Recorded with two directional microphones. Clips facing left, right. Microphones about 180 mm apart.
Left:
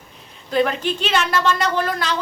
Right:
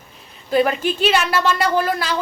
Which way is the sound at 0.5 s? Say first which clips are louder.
Right 2 dB; 10° right (ahead or behind).